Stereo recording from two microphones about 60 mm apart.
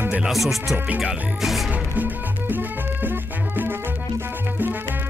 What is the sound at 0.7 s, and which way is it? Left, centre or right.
Music, centre.